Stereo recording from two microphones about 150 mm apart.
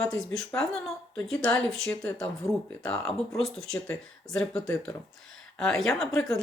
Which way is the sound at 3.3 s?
Centre (ahead or behind).